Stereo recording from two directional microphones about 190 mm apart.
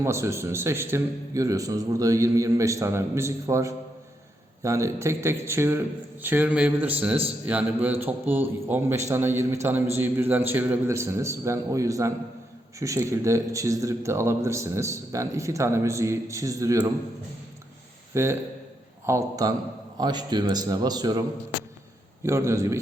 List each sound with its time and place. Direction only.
0.0 s a man's voice: 15° right (ahead or behind)
18.1 s a man's voice: 15° right (ahead or behind)